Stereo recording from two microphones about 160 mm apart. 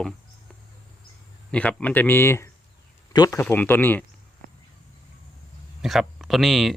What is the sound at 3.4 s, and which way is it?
Speech, 15° left (ahead or behind).